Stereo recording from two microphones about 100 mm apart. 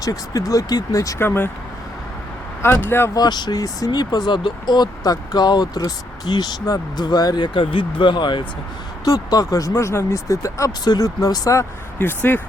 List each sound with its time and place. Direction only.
0.0 s speech: 35° left (ahead or behind)
1.2 s speech: 20° left (ahead or behind)
2.6 s speech: 25° left (ahead or behind)
3.2 s speech: 45° left (ahead or behind)
9.0 s speech: 40° left (ahead or behind)
11.9 s speech: 20° left (ahead or behind)